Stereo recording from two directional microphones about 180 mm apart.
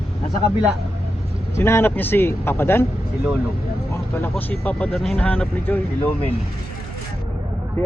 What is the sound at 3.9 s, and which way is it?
Speech, 10° left (ahead or behind).